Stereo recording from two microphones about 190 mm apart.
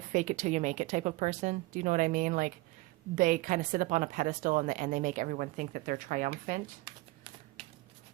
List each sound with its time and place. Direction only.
0.1 s speech: 40° right (ahead or behind)